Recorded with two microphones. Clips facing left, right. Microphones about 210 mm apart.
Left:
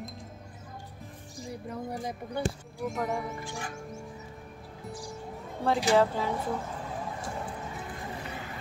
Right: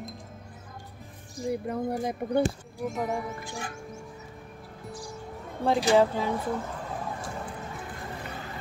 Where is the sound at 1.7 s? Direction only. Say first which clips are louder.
Right 6 dB; 60° right (ahead or behind).